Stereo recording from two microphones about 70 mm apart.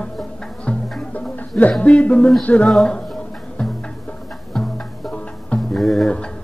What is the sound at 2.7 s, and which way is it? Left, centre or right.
Speech, centre.